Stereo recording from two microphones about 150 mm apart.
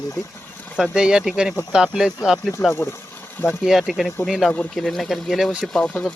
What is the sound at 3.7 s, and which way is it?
Speech, centre (ahead or behind).